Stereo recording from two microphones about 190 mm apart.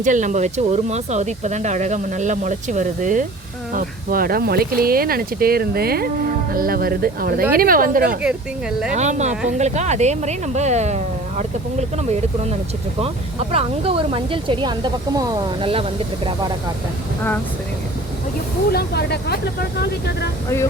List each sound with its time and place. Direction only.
0.0 s speech: 40° right (ahead or behind)
18.7 s speech: 55° left (ahead or behind)